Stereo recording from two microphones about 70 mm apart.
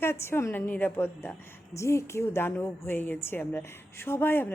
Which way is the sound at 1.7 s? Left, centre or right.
Left.